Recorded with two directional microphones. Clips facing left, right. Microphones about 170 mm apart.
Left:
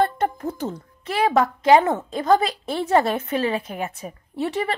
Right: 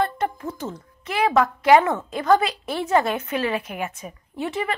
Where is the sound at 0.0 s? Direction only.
40° left (ahead or behind).